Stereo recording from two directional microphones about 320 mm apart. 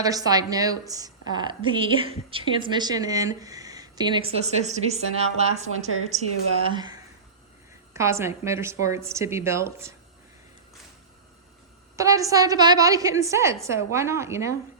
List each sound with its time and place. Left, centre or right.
0.0 s a woman's voice: centre
5.7 s a woman's voice: left
6.1 s a woman's voice: right
11.9 s a woman's voice: centre